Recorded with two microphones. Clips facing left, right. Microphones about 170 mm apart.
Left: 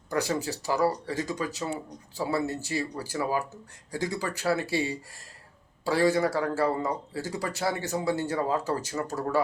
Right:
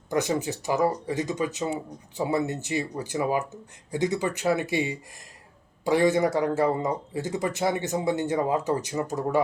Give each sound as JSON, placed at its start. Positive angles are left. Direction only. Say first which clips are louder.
{"t": 0.1, "sound": "speech", "louder": "right 3 dB", "side_deg": -20}